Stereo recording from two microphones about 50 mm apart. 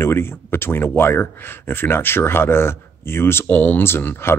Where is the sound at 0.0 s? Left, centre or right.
Left.